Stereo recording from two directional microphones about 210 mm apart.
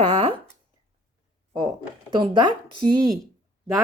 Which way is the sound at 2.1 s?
25° right (ahead or behind).